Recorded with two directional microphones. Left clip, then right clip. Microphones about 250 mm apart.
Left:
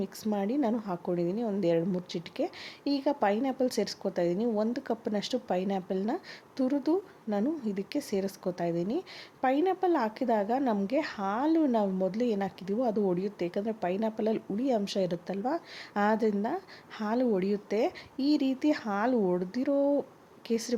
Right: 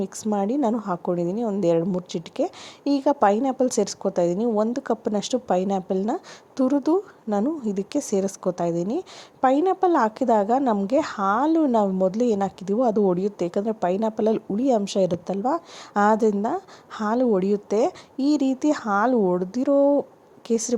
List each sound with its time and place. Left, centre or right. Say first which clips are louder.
0.0 s a woman's voice: right 7 dB; centre